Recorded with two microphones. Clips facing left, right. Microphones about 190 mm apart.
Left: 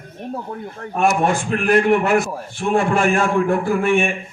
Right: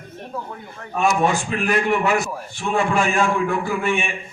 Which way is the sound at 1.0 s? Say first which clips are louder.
Left 1 dB; 55° left (ahead or behind).